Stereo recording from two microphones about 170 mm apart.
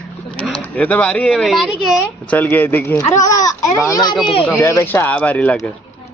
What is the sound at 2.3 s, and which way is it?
Speech, 10° left (ahead or behind).